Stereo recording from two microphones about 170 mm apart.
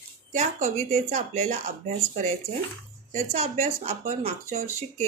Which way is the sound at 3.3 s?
40° right (ahead or behind).